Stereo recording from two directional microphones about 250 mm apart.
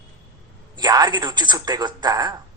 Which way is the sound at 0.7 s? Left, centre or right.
Centre.